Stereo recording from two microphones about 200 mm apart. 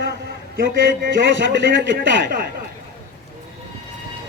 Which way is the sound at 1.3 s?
65° right (ahead or behind).